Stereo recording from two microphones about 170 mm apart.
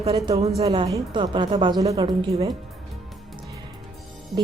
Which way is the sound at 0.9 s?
25° right (ahead or behind).